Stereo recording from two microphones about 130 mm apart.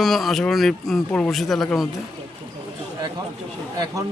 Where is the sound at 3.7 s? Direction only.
30° right (ahead or behind).